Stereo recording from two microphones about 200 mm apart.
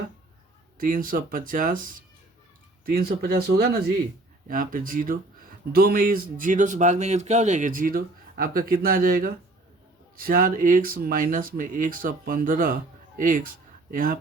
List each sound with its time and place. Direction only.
0.8 s speech: 45° right (ahead or behind)
2.8 s speech: 50° right (ahead or behind)